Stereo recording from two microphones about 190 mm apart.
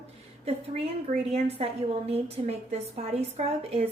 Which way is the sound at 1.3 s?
30° right (ahead or behind).